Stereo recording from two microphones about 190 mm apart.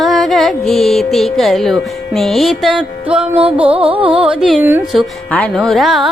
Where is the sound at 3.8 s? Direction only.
30° right (ahead or behind).